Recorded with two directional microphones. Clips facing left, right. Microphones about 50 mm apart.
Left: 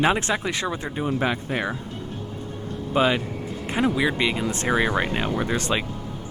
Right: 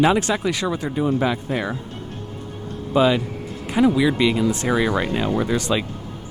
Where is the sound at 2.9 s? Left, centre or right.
Left.